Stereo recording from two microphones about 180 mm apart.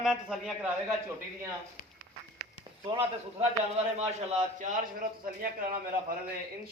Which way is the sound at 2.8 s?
30° right (ahead or behind).